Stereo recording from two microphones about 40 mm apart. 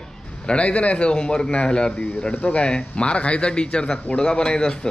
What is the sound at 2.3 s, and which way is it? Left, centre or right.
Speech, left.